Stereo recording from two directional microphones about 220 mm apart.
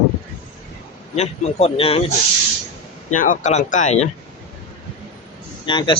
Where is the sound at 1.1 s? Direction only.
30° left (ahead or behind).